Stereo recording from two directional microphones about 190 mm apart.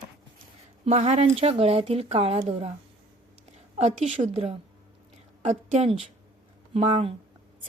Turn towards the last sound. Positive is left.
turn(degrees=-30)  # may be behind; listen again after turning